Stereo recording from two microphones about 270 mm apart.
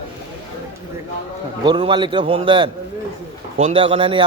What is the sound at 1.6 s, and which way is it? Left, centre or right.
A man's voice, centre.